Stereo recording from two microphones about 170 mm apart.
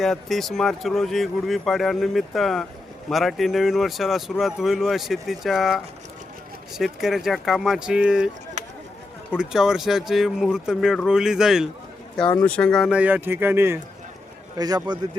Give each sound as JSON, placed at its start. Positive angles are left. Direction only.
{"t": 0.0, "sound": "speech", "side_deg": 0}
{"t": 8.6, "sound": "a sound", "side_deg": -45}
{"t": 9.4, "sound": "speech", "side_deg": -5}
{"t": 13.0, "sound": "a man's voice", "side_deg": -10}